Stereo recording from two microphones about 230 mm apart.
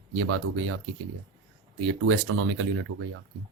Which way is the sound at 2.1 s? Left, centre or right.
Right.